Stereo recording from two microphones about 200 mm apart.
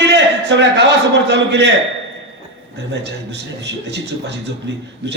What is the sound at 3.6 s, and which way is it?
Speech, 60° right (ahead or behind).